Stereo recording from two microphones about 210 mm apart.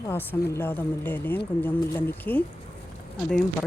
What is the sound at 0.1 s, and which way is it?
Speech, 10° left (ahead or behind).